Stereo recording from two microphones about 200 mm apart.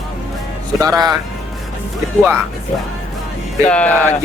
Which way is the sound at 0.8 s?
20° right (ahead or behind).